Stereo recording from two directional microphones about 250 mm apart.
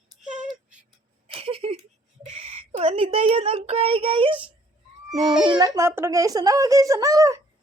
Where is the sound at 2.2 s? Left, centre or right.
Right.